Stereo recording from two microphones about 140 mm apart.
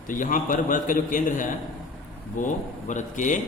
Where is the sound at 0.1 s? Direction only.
70° left (ahead or behind).